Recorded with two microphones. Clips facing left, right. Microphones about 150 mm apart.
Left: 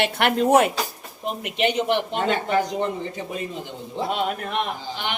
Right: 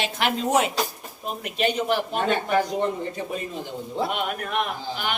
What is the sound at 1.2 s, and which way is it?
A man's voice, 20° left (ahead or behind).